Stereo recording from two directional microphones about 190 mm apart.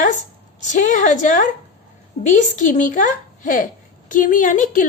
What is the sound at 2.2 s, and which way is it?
A woman's voice, 40° left (ahead or behind).